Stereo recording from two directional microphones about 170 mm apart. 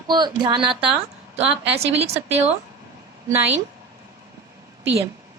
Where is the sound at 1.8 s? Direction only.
40° right (ahead or behind).